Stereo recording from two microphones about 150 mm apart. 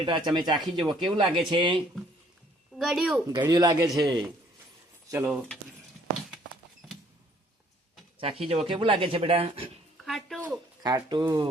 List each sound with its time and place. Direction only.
0.0 s speech: 30° right (ahead or behind)
2.7 s speech: centre (ahead or behind)
3.5 s speech: 25° right (ahead or behind)
5.0 s speech: 15° right (ahead or behind)
8.2 s speech: 40° right (ahead or behind)
10.1 s speech: centre (ahead or behind)
10.8 s speech: 25° right (ahead or behind)